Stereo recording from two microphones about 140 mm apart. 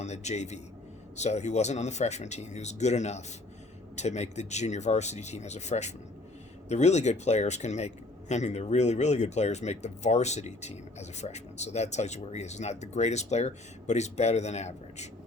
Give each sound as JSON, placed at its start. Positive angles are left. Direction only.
{"t": 0.0, "sound": "a man's voice", "side_deg": 55}